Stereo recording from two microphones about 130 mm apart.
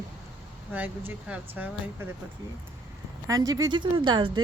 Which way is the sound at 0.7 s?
15° right (ahead or behind).